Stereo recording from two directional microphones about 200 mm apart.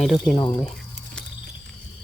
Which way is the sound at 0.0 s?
Centre (ahead or behind).